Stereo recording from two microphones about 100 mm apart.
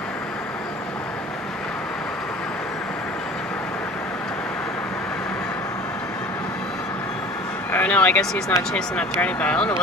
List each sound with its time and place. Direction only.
7.7 s speech: 15° left (ahead or behind)